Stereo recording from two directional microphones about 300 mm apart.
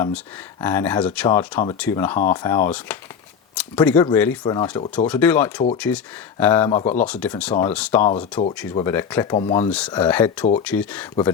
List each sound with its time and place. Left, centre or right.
0.6 s speech: centre
8.0 s speech: left
8.7 s speech: centre
9.6 s speech: centre